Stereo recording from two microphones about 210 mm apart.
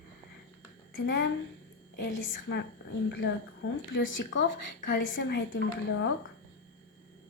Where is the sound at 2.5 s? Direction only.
80° left.